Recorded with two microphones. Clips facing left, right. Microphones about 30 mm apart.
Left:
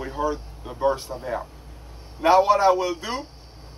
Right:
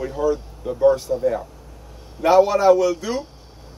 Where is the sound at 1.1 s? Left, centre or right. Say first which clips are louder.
Right 11 dB; centre.